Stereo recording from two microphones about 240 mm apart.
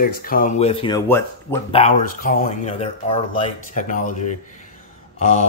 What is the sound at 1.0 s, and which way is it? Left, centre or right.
Speech, centre.